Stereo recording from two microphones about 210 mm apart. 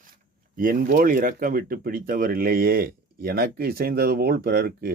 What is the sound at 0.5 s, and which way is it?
Speech, 45° right (ahead or behind).